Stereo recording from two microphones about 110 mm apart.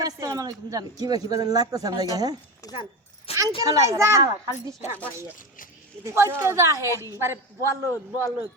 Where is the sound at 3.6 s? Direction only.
30° right (ahead or behind).